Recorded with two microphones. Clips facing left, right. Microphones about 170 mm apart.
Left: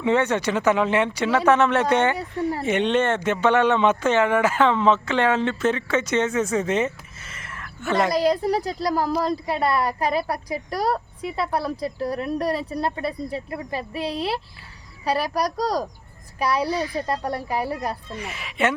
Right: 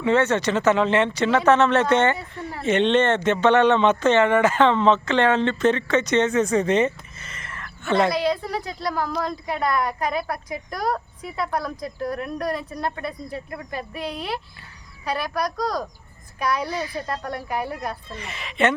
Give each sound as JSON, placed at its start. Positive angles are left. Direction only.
{"t": 0.0, "sound": "speech", "side_deg": 15}
{"t": 8.1, "sound": "a woman's voice", "side_deg": 40}
{"t": 18.1, "sound": "speech", "side_deg": 10}